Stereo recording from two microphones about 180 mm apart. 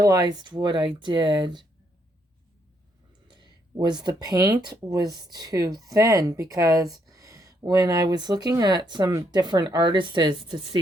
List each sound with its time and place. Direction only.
0.0 s speech: 20° right (ahead or behind)
3.2 s speech: 25° right (ahead or behind)